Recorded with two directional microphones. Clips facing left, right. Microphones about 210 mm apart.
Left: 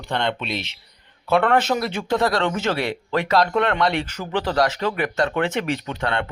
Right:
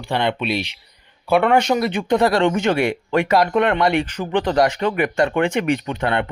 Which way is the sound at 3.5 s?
5° right (ahead or behind).